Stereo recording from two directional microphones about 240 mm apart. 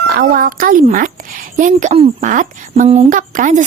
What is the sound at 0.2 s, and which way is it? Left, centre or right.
A woman's voice, right.